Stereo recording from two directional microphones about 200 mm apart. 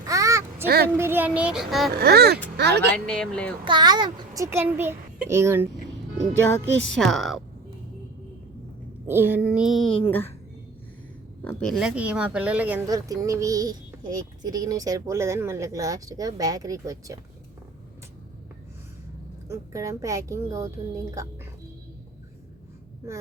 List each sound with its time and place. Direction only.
0.0 s a sound: 15° right (ahead or behind)
0.9 s speech: 10° right (ahead or behind)
1.9 s speech: 50° right (ahead or behind)
2.9 s speech: 5° left (ahead or behind)
3.6 s speech: 20° right (ahead or behind)
6.9 s speech: centre (ahead or behind)
9.0 s speech: 10° right (ahead or behind)
10.0 s speech: 10° left (ahead or behind)
11.4 s speech: centre (ahead or behind); by 17.2 s 15° right (ahead or behind)
19.5 s speech: 15° right (ahead or behind)